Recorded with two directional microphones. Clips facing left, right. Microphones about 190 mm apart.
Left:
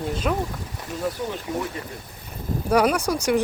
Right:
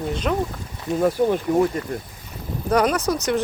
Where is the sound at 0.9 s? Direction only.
45° right (ahead or behind).